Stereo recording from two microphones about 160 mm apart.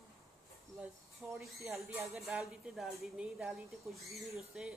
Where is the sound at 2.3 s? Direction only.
5° right (ahead or behind).